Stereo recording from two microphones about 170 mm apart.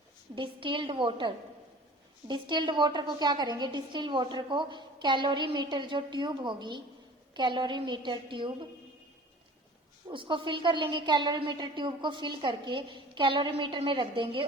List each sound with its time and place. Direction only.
0.3 s a woman's voice: 30° right (ahead or behind)
10.1 s a woman's voice: 30° right (ahead or behind)